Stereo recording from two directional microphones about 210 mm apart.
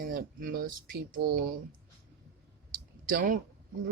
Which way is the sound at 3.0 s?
40° right (ahead or behind).